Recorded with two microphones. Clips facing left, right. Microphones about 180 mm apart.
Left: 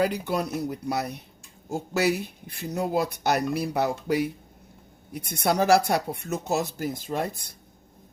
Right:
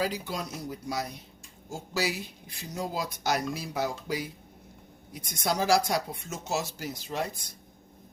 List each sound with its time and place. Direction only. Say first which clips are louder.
0.0 s speech: left 6 dB; 60° left (ahead or behind)